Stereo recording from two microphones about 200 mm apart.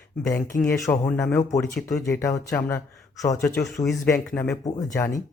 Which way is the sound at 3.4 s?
5° left (ahead or behind).